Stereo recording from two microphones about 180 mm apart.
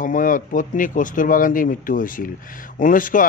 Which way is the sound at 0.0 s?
45° left (ahead or behind).